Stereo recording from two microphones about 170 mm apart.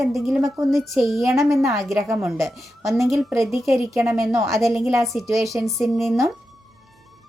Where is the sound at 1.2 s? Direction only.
15° right (ahead or behind).